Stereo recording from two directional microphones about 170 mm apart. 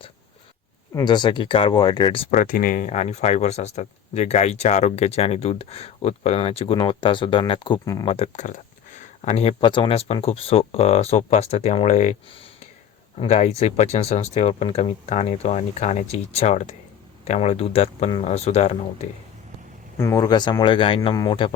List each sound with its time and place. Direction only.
0.9 s speech: 25° left (ahead or behind)
2.3 s speech: 55° left (ahead or behind)
13.1 s speech: 40° left (ahead or behind)
20.0 s speech: 20° left (ahead or behind)